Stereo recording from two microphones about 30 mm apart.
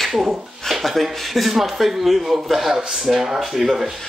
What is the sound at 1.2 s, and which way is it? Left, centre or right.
Speech, centre.